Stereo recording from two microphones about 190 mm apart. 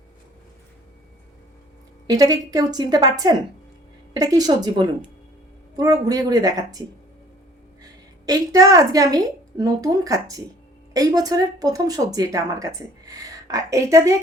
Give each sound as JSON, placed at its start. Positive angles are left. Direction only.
{"t": 2.0, "sound": "speech", "side_deg": -20}
{"t": 8.3, "sound": "speech", "side_deg": -20}